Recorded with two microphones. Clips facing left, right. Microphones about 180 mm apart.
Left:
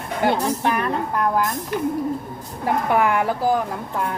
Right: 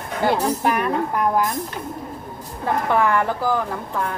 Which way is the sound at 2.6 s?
15° left (ahead or behind).